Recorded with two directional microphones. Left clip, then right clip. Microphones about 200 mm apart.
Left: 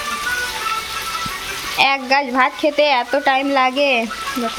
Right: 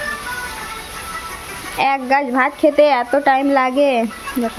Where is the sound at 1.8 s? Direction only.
20° right (ahead or behind).